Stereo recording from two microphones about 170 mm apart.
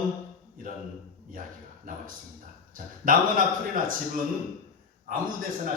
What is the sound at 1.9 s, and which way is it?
Speech, 55° right (ahead or behind).